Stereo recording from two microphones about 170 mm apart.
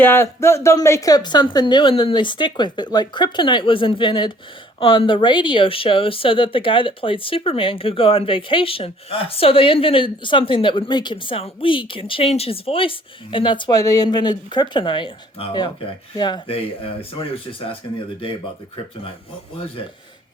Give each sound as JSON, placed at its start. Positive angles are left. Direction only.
{"t": 0.0, "sound": "a woman's voice", "side_deg": 15}